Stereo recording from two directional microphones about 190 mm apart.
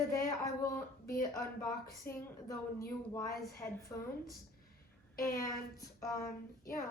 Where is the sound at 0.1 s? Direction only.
15° left (ahead or behind).